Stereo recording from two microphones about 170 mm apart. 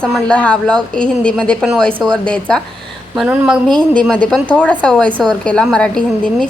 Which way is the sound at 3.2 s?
5° right (ahead or behind).